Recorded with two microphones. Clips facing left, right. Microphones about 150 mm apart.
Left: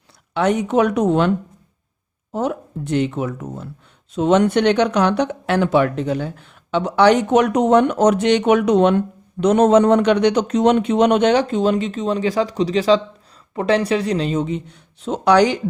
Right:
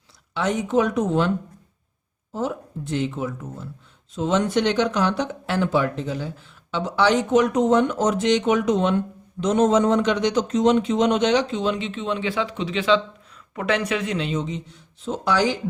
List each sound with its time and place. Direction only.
0.3 s speech: 60° left (ahead or behind)
2.3 s speech: 65° left (ahead or behind)